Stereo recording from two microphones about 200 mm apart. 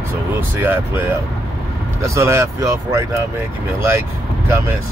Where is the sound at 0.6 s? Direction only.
10° right (ahead or behind).